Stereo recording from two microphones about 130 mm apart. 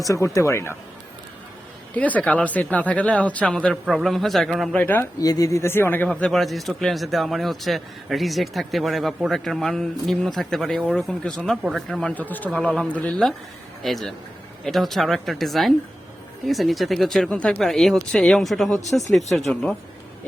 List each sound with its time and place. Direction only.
0.0 s speech: 25° left (ahead or behind)
2.0 s speech: 10° left (ahead or behind)
4.8 s speech: 15° left (ahead or behind)
5.2 s speech: 25° left (ahead or behind); by 19.5 s 5° left (ahead or behind)